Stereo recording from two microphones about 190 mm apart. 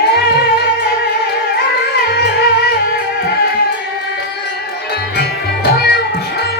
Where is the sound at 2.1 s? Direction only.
60° left (ahead or behind).